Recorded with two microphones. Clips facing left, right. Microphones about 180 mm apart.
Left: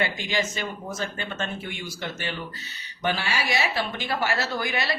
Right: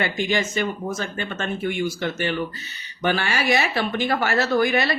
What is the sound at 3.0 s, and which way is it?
Speech, 55° right (ahead or behind).